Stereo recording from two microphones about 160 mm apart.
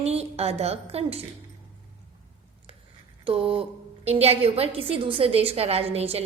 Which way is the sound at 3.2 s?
35° right (ahead or behind).